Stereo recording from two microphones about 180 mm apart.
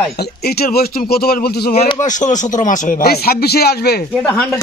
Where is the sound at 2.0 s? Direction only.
45° left (ahead or behind); by 3.9 s 60° left (ahead or behind).